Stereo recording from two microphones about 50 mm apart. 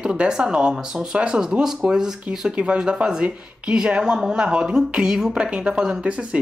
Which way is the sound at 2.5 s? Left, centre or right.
Right.